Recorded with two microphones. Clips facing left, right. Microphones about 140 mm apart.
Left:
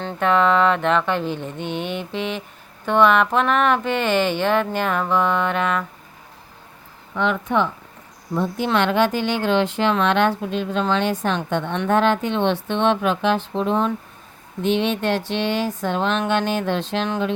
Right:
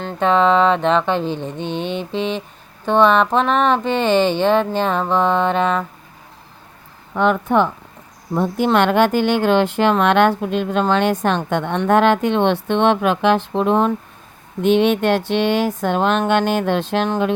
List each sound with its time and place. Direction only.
0.2 s speech: 25° right (ahead or behind)
7.1 s a woman's voice: 45° right (ahead or behind)